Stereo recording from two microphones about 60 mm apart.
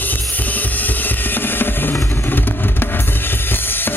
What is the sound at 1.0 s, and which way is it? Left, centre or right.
Drum, left.